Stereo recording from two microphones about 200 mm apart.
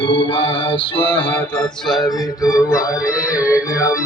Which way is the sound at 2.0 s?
20° left (ahead or behind).